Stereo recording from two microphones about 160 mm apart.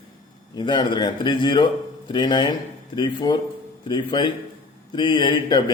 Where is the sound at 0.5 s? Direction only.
30° left (ahead or behind).